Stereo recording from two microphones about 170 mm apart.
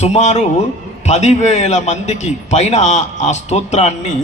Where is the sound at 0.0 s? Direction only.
40° left (ahead or behind).